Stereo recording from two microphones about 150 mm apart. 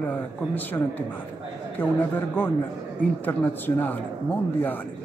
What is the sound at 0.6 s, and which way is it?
Speech, 10° left (ahead or behind).